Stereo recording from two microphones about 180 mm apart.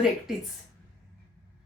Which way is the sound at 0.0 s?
Centre (ahead or behind).